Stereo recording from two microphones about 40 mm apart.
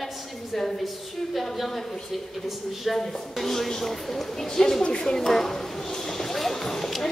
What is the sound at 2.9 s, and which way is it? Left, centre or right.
A woman's voice, centre.